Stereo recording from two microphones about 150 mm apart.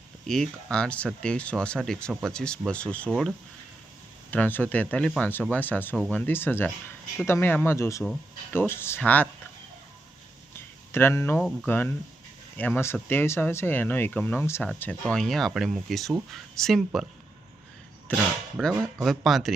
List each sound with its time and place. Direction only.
0.3 s speech: 5° left (ahead or behind)
4.3 s speech: 10° left (ahead or behind)
10.9 s speech: 15° left (ahead or behind); by 17.1 s centre (ahead or behind)
18.1 s speech: 10° left (ahead or behind)
18.5 s speech: 5° right (ahead or behind)